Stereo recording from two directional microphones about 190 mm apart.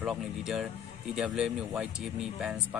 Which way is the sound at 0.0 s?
5° right (ahead or behind).